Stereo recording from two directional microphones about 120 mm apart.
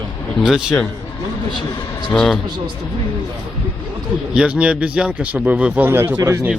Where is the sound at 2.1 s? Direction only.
5° left (ahead or behind).